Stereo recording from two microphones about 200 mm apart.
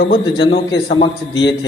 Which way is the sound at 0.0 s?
55° left (ahead or behind).